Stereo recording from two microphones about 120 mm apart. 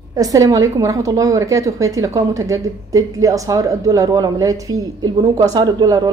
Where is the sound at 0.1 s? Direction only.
30° right (ahead or behind).